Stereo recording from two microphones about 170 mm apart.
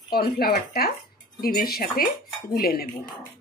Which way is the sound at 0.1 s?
65° left (ahead or behind).